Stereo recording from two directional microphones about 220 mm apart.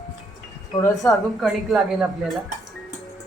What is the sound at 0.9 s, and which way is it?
Speech, centre (ahead or behind).